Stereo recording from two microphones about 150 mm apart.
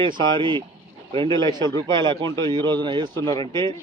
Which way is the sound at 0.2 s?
35° right (ahead or behind).